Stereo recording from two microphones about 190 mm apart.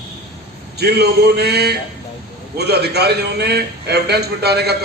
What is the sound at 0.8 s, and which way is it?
A man's voice, 60° right (ahead or behind).